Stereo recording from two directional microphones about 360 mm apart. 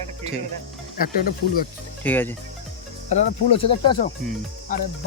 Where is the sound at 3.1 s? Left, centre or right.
Centre.